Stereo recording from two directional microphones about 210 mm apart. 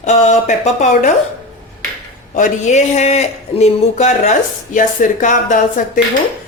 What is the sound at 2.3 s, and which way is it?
A man's voice, 35° left (ahead or behind).